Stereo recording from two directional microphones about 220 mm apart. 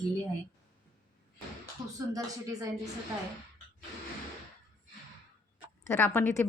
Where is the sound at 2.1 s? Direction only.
15° right (ahead or behind).